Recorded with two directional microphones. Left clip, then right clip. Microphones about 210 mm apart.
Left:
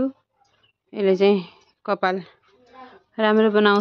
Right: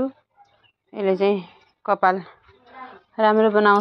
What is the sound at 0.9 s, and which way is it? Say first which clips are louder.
A woman's voice: left 2 dB; 25° left (ahead or behind).